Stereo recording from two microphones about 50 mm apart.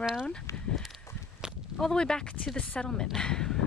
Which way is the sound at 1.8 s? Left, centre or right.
Centre.